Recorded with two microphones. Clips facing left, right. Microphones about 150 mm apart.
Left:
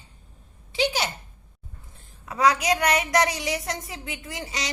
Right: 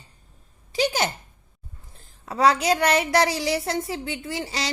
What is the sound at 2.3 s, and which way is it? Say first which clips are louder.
A woman's voice: right 2 dB; 30° right (ahead or behind).